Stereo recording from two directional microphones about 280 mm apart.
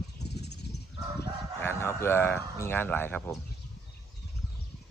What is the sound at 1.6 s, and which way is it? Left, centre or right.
Speech, centre.